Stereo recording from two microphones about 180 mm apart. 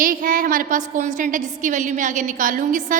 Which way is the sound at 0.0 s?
50° right (ahead or behind).